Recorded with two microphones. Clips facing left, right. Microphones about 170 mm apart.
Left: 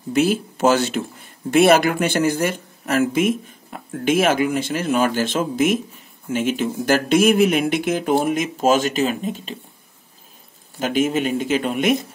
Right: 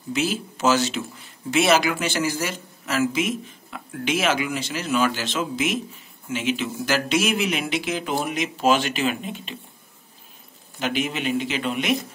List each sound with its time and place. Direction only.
0.1 s speech: 55° left (ahead or behind)
10.8 s speech: 45° left (ahead or behind)